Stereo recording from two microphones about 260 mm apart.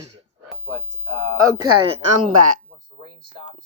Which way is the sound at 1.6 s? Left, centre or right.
Right.